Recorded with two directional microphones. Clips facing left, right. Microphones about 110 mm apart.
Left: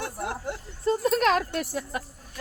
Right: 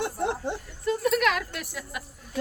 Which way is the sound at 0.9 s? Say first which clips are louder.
Left 2 dB; 35° left (ahead or behind).